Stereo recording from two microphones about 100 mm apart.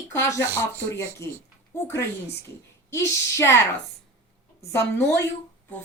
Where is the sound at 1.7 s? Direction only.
30° left (ahead or behind).